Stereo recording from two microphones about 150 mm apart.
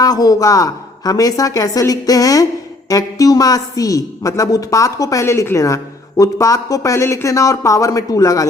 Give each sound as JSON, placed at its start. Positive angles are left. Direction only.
{"t": 0.0, "sound": "a woman's voice", "side_deg": 25}